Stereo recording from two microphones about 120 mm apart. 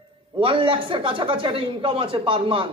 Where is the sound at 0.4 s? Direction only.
45° right (ahead or behind).